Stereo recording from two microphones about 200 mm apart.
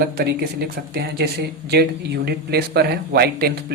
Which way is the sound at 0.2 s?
50° right (ahead or behind).